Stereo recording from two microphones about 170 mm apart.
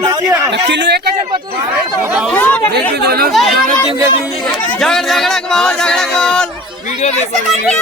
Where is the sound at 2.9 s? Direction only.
65° right (ahead or behind).